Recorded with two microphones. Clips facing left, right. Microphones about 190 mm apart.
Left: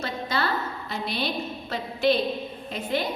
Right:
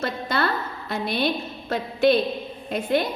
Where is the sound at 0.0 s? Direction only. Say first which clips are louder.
Right 3 dB; 55° right (ahead or behind).